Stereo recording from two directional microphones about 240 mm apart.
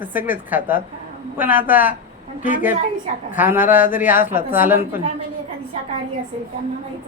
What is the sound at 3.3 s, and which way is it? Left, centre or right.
Speech, centre.